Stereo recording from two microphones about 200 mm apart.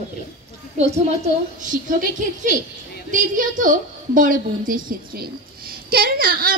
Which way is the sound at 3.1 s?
40° right (ahead or behind).